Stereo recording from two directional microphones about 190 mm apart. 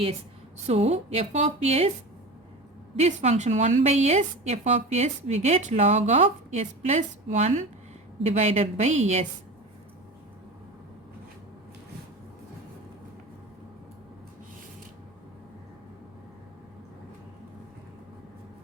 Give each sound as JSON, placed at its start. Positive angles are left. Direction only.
{"t": 0.7, "sound": "a woman's voice", "side_deg": -35}
{"t": 2.9, "sound": "a woman's voice", "side_deg": -35}